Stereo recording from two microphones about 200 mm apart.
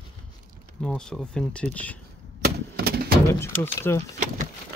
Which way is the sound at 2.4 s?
50° right (ahead or behind).